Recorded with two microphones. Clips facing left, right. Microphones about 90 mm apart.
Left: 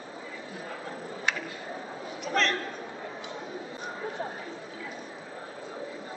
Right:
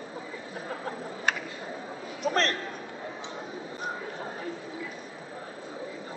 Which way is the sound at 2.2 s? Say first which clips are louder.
Right 1 dB; 40° right (ahead or behind).